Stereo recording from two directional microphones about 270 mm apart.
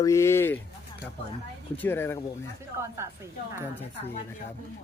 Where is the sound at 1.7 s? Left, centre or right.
Centre.